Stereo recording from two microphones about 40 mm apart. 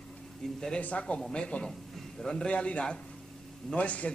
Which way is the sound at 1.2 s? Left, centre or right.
Centre.